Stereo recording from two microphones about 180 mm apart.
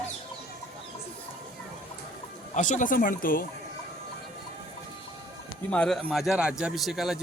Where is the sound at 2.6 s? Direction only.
45° left (ahead or behind).